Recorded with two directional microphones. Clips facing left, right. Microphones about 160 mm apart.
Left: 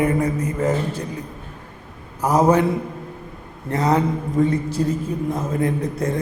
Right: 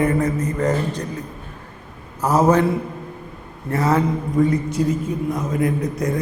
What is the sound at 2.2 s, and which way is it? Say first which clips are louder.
Speech: even; 15° left (ahead or behind).